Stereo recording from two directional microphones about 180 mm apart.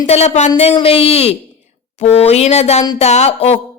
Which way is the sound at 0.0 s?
40° left (ahead or behind).